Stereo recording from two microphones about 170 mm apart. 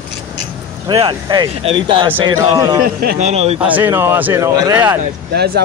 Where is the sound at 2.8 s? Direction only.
60° right (ahead or behind).